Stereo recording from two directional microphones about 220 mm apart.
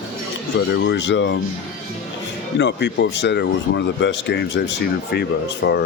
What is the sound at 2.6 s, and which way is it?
Speech, 50° left (ahead or behind).